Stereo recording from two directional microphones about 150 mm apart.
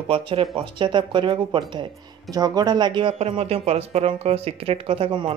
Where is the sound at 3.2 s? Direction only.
45° right (ahead or behind).